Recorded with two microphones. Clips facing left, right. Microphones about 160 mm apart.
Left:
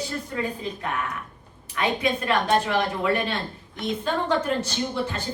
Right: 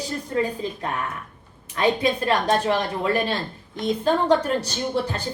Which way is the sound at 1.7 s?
35° right (ahead or behind).